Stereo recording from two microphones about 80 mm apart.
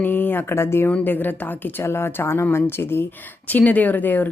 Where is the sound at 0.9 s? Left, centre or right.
Centre.